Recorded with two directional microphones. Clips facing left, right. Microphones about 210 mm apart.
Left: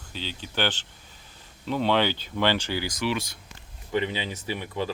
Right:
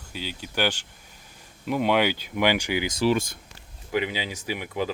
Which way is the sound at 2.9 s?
40° right (ahead or behind).